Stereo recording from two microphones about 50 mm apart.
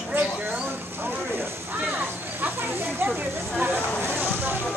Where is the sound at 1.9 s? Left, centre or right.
Right.